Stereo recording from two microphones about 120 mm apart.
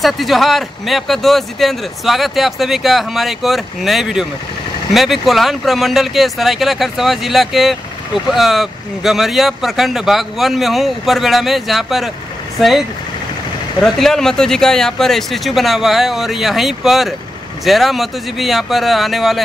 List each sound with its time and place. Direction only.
0.0 s speech: centre (ahead or behind)